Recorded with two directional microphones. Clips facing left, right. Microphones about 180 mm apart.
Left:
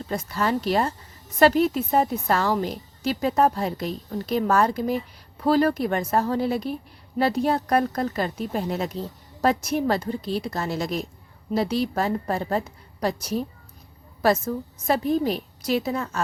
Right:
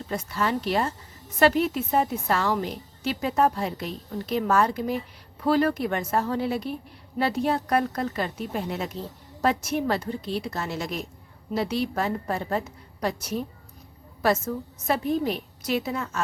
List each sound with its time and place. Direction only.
0.1 s a woman's voice: 40° left (ahead or behind)